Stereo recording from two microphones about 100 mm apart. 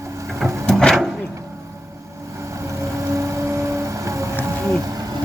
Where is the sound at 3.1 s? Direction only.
30° right (ahead or behind).